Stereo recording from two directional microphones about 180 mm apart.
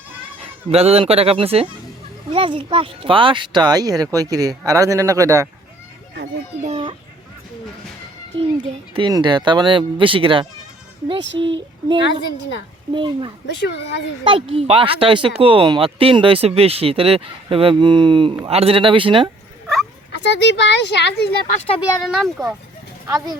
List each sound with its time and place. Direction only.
0.7 s speech: 35° right (ahead or behind); by 5.5 s 15° right (ahead or behind)
6.7 s a child's voice: 30° right (ahead or behind)
8.5 s speech: 25° right (ahead or behind)
13.5 s speech: 75° left (ahead or behind)
14.3 s speech: 30° right (ahead or behind)
20.2 s speech: 80° left
21.8 s speech: centre (ahead or behind)